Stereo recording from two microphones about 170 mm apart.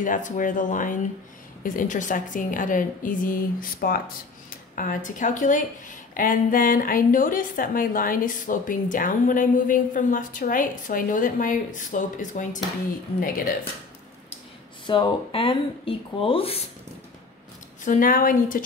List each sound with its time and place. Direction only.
0.0 s a woman's voice: 50° left (ahead or behind)
14.9 s speech: 25° left (ahead or behind)
17.8 s a woman's voice: 50° left (ahead or behind)